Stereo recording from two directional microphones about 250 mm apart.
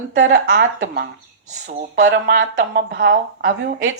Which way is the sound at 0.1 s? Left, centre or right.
Right.